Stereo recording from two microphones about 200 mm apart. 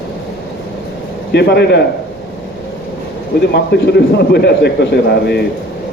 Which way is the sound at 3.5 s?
55° left (ahead or behind).